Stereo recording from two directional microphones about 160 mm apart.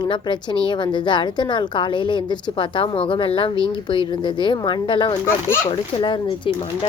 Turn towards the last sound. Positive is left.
turn(degrees=30)  # may be behind; listen again after turning